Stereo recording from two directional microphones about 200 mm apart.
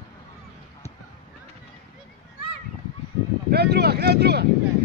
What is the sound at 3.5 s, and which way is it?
Speech, 55° right (ahead or behind).